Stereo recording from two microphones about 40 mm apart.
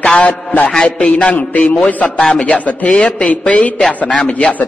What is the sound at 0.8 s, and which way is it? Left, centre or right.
Speech, left.